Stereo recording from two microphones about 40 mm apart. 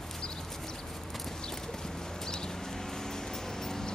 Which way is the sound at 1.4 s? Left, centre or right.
Centre.